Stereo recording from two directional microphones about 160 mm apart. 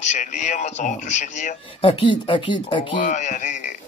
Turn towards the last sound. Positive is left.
turn(degrees=50)  # may be behind; listen again after turning